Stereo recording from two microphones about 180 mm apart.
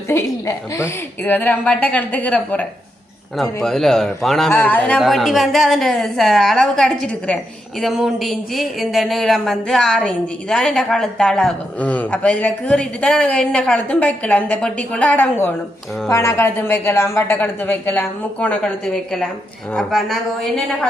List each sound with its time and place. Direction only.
0.1 s speech: 15° left (ahead or behind)